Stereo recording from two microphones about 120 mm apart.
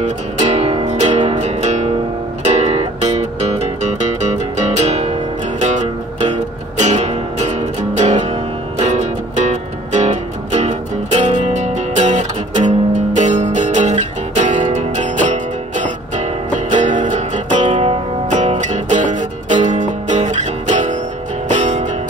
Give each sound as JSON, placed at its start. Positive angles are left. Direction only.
{"t": 0.0, "sound": "music", "side_deg": -70}